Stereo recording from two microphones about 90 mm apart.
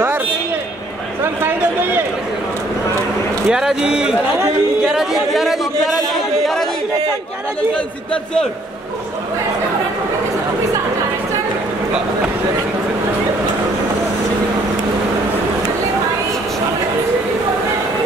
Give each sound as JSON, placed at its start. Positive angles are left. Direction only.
{"t": 1.2, "sound": "a sound", "side_deg": -25}
{"t": 3.4, "sound": "a man's voice", "side_deg": -5}
{"t": 6.4, "sound": "chatter", "side_deg": 5}
{"t": 7.7, "sound": "a man's voice", "side_deg": 10}